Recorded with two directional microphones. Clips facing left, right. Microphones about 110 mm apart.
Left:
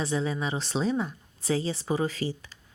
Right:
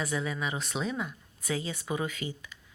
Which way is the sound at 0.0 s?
30° left (ahead or behind).